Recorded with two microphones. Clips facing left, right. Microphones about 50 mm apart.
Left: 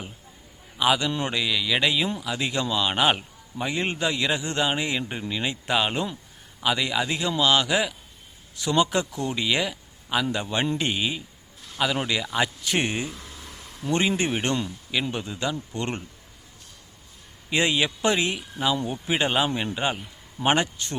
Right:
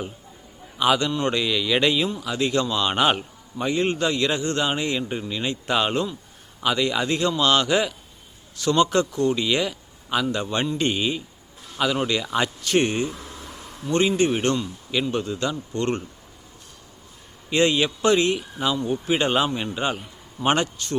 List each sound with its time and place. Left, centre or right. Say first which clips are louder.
0.8 s a man's voice: right 2 dB; centre
17.5 s a man's voice: right 3 dB; centre